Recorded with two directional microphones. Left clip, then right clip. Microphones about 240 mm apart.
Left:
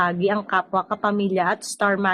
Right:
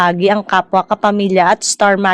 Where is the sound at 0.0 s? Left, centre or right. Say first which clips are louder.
Right 9 dB; right.